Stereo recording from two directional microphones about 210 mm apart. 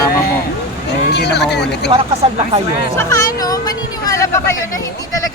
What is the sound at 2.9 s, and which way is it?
Speech, 15° left (ahead or behind).